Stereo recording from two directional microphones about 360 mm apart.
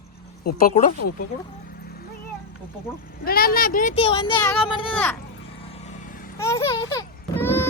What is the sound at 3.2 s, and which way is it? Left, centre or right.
Speech, left.